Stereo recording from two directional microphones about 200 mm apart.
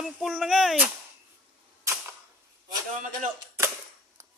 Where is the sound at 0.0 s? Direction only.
Centre (ahead or behind).